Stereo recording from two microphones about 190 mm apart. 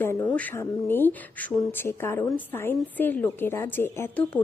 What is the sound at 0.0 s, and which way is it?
Speech, 10° left (ahead or behind).